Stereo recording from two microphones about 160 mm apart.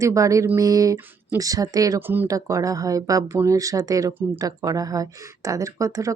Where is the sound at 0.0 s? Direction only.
20° right (ahead or behind).